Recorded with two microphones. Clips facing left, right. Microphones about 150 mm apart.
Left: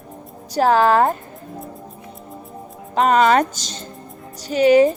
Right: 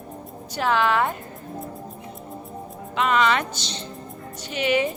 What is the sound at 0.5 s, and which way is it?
Speech, 40° left (ahead or behind).